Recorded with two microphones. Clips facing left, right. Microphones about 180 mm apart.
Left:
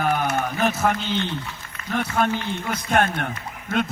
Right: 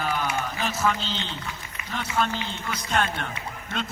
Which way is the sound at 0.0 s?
50° left (ahead or behind).